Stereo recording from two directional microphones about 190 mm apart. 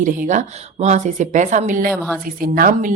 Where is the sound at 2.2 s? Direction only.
45° right (ahead or behind).